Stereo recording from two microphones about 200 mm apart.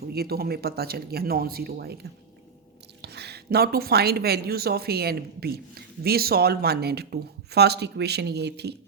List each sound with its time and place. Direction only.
0.0 s speech: 50° right (ahead or behind)
3.0 s speech: 55° right (ahead or behind)